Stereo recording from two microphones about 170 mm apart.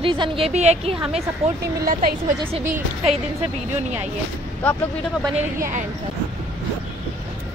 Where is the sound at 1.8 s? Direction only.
60° right (ahead or behind).